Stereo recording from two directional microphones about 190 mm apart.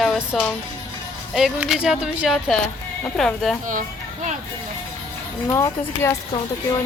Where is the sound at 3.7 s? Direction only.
40° right (ahead or behind).